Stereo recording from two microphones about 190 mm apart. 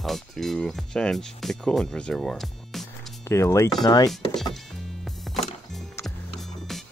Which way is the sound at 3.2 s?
15° left (ahead or behind).